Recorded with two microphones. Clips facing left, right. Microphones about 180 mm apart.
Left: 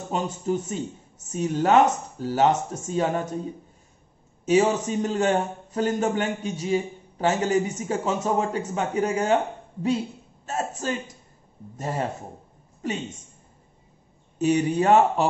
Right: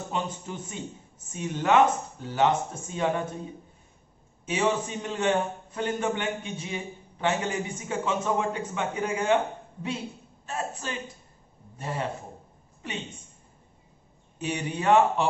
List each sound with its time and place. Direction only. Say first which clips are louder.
0.1 s speech: left 8 dB; 40° left (ahead or behind)
4.5 s speech: left 6 dB; 40° left (ahead or behind)
10.4 s a man's voice: left 5 dB; 40° left (ahead or behind)
14.4 s speech: left 8 dB; 40° left (ahead or behind)